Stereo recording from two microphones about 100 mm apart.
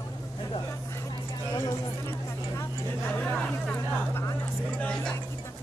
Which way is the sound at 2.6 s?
20° left (ahead or behind).